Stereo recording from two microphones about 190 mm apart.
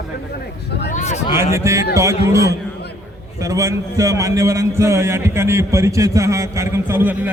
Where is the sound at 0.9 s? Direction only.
40° left (ahead or behind).